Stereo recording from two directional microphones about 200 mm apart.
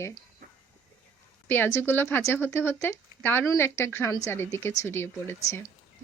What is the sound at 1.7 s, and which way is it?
Speech, 10° left (ahead or behind).